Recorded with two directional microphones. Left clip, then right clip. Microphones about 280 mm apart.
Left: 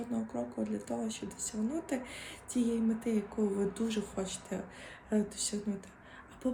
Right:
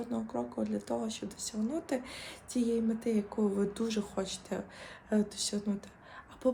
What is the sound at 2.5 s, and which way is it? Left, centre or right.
Speech, centre.